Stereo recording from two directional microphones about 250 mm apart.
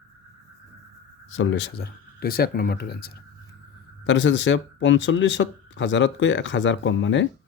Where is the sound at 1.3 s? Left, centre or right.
Left.